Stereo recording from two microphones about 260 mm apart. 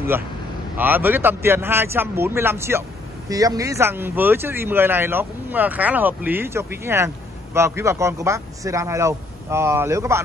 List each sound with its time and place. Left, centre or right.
0.7 s speech: centre